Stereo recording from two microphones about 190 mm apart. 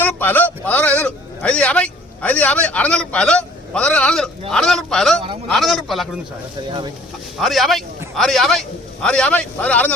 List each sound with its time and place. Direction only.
0.0 s a man's voice: 10° left (ahead or behind)
6.7 s speech: 25° right (ahead or behind)
7.3 s a man's voice: centre (ahead or behind)